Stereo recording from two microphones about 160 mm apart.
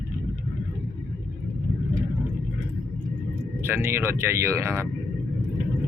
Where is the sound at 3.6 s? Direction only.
15° right (ahead or behind).